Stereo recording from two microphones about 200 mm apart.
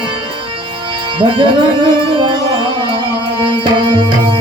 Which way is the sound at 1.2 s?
25° right (ahead or behind).